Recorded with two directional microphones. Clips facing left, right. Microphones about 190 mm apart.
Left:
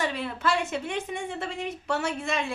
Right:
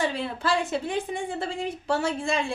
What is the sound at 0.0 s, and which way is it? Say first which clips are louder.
A woman's voice: right 1 dB; 30° right (ahead or behind).